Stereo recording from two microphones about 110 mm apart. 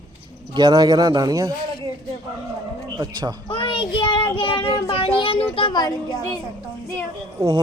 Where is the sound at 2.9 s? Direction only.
40° right (ahead or behind).